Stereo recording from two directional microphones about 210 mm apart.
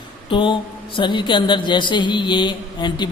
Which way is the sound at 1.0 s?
20° left (ahead or behind).